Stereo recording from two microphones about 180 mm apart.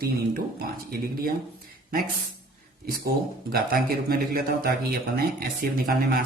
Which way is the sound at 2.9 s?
55° right (ahead or behind).